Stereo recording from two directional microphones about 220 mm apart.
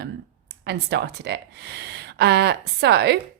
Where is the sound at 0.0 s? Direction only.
50° right (ahead or behind).